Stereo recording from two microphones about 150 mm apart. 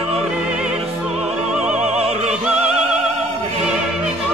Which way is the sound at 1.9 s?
45° right (ahead or behind).